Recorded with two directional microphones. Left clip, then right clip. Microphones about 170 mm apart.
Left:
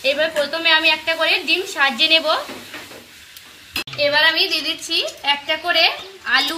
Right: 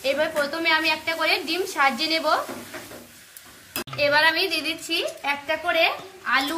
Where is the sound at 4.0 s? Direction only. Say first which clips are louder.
Left 4 dB; 10° left (ahead or behind).